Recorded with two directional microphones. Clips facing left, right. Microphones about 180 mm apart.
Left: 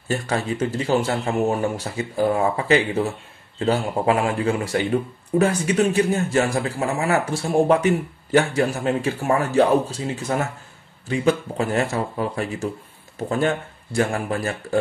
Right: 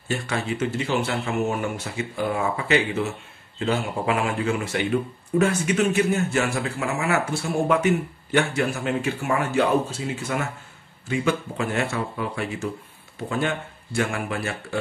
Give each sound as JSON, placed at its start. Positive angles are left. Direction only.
{"t": 0.1, "sound": "speech", "side_deg": 40}